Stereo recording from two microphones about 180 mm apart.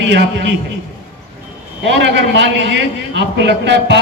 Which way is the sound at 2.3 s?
75° right (ahead or behind).